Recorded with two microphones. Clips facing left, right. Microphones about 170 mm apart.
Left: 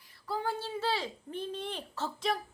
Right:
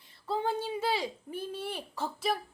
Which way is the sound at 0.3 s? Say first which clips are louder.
Right 3 dB; 20° right (ahead or behind).